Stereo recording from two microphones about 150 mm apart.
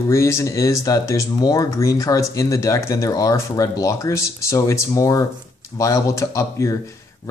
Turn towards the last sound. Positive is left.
turn(degrees=20)  # may be behind; listen again after turning